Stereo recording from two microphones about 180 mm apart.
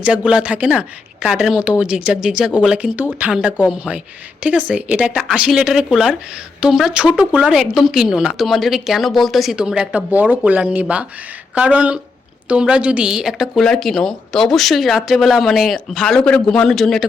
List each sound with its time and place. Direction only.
0.0 s speech: 5° right (ahead or behind)